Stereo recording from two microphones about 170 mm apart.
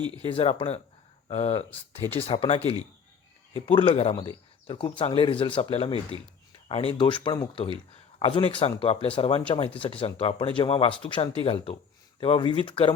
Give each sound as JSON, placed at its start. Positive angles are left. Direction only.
{"t": 0.0, "sound": "speech", "side_deg": -25}
{"t": 0.3, "sound": "speech", "side_deg": 30}